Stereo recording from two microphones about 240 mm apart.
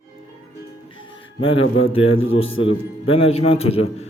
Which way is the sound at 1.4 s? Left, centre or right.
Left.